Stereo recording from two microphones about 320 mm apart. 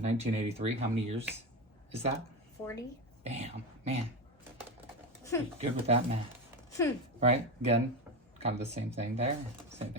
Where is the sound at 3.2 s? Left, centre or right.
Centre.